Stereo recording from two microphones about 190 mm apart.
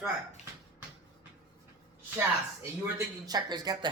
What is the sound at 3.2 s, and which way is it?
Speech, 20° right (ahead or behind).